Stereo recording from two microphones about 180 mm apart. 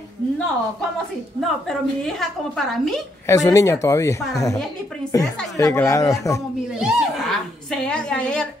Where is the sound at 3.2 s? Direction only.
20° left (ahead or behind).